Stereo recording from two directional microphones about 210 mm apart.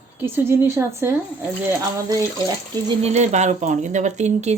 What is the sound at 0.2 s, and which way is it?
A woman's voice, 10° right (ahead or behind).